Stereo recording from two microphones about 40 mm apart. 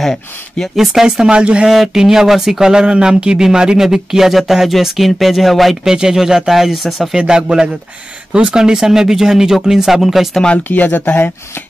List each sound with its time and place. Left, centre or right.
0.0 s speech: centre
0.7 s speech: centre
2.0 s speech: centre
3.8 s speech: centre
5.9 s speech: centre
7.0 s speech: centre
10.7 s speech: left